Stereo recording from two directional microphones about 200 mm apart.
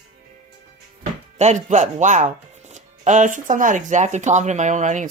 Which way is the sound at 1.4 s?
35° right (ahead or behind).